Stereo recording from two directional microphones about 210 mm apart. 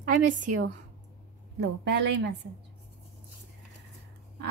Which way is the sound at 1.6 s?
55° right (ahead or behind).